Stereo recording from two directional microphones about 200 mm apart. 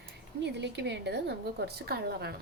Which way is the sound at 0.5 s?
60° right (ahead or behind).